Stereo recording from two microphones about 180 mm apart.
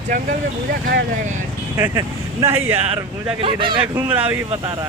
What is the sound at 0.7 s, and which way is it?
Speech, 60° right (ahead or behind).